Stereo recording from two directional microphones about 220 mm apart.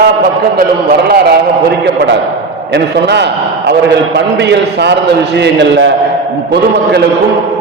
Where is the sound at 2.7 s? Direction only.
50° right (ahead or behind).